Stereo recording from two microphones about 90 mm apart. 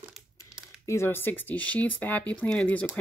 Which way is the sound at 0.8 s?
30° left (ahead or behind).